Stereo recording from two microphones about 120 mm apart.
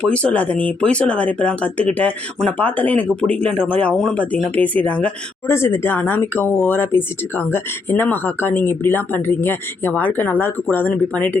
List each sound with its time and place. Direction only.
0.0 s speech: 10° left (ahead or behind)